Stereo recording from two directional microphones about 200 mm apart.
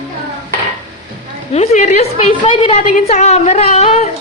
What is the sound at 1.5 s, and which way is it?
A woman's voice, 35° left (ahead or behind).